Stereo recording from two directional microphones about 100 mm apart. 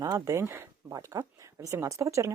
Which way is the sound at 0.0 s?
40° right (ahead or behind).